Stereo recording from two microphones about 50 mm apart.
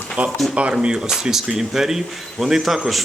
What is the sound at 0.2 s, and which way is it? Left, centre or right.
Speech, right.